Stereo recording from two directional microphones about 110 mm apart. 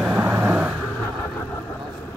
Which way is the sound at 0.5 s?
10° right (ahead or behind).